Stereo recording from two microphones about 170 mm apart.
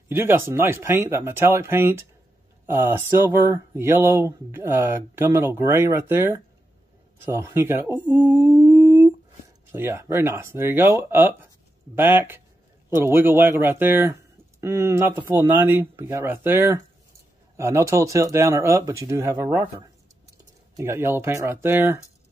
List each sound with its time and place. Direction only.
0.1 s speech: 15° right (ahead or behind)
8.5 s humming: 15° right (ahead or behind)
9.7 s speech: 15° right (ahead or behind)
20.7 s speech: 15° right (ahead or behind)